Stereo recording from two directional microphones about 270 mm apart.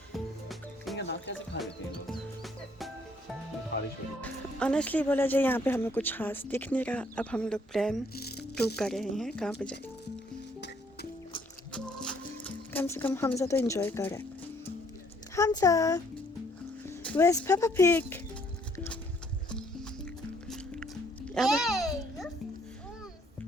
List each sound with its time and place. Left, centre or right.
0.9 s music: left
2.1 s music: centre
4.2 s speech: centre
8.1 s music: left
8.5 s speech: centre
11.7 s music: centre
15.4 s speech: centre
21.3 s a sound: centre